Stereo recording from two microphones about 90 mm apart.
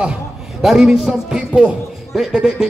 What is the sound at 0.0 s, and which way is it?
A man's voice, 5° right (ahead or behind).